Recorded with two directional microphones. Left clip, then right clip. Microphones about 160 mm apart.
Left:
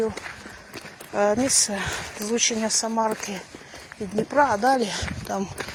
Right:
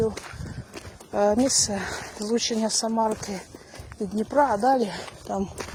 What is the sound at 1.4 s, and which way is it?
Speech, 40° right (ahead or behind).